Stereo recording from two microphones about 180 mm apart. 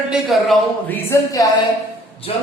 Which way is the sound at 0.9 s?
15° left (ahead or behind).